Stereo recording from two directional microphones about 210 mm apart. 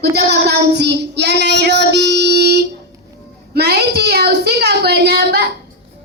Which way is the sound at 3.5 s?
50° right (ahead or behind).